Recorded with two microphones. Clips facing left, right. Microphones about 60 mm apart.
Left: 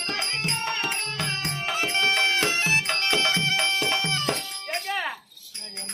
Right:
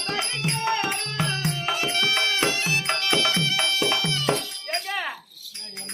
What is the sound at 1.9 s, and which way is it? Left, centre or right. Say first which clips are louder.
Music: left 4 dB; left.